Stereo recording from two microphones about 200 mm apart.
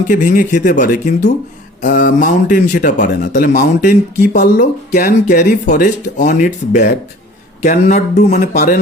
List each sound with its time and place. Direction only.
0.1 s speech: 40° left (ahead or behind)